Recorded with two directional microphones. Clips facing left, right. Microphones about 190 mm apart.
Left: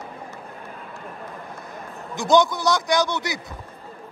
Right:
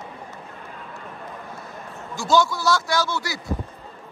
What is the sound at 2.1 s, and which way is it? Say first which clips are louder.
A man's voice: left 2 dB; 20° left (ahead or behind).